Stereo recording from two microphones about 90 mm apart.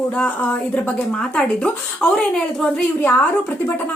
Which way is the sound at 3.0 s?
20° left (ahead or behind).